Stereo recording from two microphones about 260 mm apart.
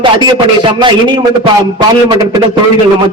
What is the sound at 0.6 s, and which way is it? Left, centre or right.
A man's voice, centre.